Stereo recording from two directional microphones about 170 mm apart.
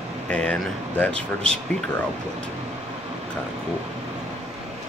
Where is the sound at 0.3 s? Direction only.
5° left (ahead or behind).